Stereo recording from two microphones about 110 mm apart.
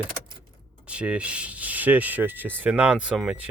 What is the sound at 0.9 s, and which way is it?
Speech, 10° right (ahead or behind).